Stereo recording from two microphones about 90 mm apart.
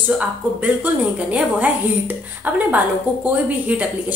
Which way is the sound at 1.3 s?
15° right (ahead or behind).